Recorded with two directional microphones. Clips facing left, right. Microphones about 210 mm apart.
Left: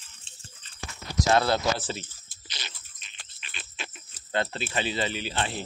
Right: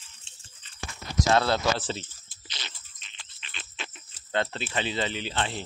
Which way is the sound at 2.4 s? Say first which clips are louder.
Even; 25° right (ahead or behind).